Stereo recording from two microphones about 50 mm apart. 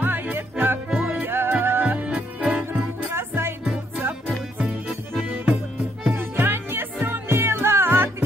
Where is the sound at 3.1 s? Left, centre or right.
Right.